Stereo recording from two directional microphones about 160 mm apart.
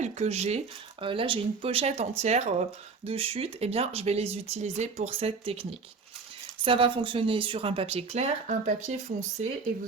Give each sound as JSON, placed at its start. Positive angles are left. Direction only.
{"t": 0.0, "sound": "speech", "side_deg": -45}
{"t": 6.7, "sound": "speech", "side_deg": -35}